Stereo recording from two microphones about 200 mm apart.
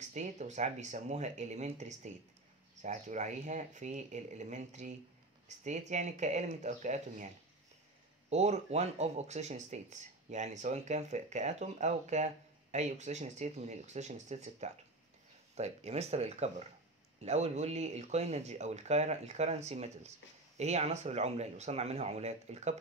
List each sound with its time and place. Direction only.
0.1 s speech: 35° right (ahead or behind)
8.3 s speech: 35° right (ahead or behind)